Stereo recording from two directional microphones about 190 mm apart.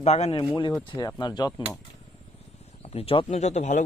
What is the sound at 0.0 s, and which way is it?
Speech, 35° left (ahead or behind).